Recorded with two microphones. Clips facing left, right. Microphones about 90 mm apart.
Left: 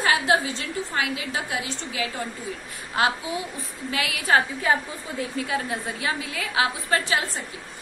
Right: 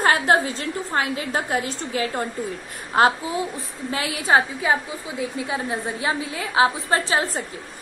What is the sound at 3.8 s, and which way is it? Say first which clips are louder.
A woman's voice: right 2 dB; 30° right (ahead or behind).